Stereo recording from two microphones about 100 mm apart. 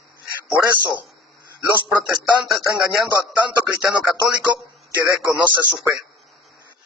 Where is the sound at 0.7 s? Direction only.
20° right (ahead or behind).